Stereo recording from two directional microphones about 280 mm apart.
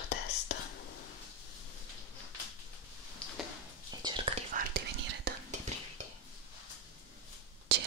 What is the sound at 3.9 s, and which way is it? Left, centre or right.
Whispering, centre.